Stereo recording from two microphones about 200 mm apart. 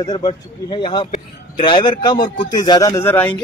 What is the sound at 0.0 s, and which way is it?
A man's voice, 20° left (ahead or behind).